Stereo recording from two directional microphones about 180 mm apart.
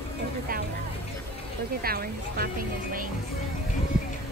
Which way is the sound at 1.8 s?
55° right (ahead or behind).